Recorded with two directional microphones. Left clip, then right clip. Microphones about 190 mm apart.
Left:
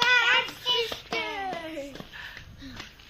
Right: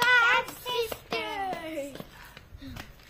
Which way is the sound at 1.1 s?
15° right (ahead or behind).